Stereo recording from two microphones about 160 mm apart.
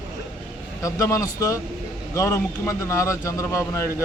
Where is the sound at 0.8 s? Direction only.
20° left (ahead or behind).